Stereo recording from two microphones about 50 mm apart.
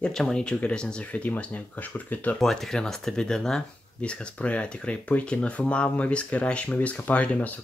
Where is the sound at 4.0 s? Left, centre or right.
Left.